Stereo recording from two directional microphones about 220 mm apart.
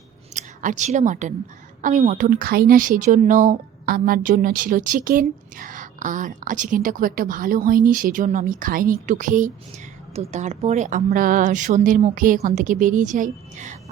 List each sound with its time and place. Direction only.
0.3 s a woman's voice: 35° right (ahead or behind)